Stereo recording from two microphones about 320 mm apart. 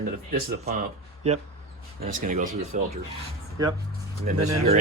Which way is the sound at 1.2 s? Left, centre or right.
Centre.